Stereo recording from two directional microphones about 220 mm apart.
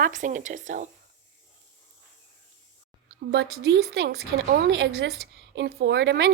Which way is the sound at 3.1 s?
50° right (ahead or behind).